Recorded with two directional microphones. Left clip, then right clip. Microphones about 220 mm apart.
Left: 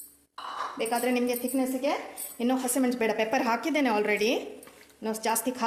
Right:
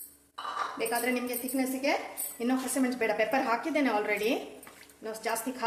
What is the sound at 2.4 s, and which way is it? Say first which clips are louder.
A woman's voice: left 3 dB; 35° left (ahead or behind).